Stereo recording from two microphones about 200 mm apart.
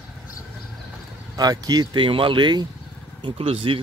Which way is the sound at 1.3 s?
20° right (ahead or behind).